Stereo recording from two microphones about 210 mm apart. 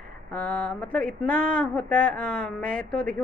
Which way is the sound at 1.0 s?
40° right (ahead or behind).